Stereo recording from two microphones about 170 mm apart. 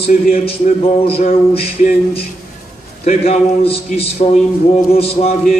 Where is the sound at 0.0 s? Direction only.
60° left (ahead or behind).